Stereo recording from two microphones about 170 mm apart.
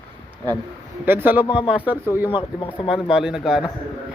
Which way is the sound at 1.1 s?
10° right (ahead or behind).